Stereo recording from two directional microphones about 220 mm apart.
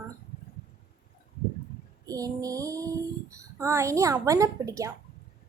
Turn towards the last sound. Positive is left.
turn(degrees=-15)  # may be behind; listen again after turning